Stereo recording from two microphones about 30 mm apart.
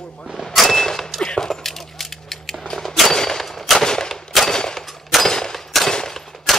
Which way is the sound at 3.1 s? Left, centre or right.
Centre.